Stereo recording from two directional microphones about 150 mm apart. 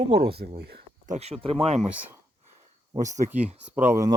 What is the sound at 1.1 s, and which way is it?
Speech, 45° right (ahead or behind).